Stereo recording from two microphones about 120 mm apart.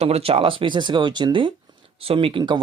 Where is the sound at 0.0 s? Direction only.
55° right (ahead or behind); by 1.5 s 40° right (ahead or behind).